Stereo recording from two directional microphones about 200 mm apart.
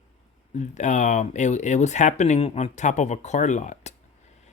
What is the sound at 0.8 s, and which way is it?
Speech, 35° left (ahead or behind).